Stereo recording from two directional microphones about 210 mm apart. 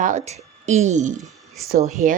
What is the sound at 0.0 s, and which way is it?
A woman's voice, 35° right (ahead or behind).